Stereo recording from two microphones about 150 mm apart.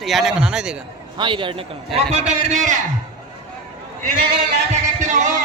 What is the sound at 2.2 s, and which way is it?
Speech, 50° right (ahead or behind).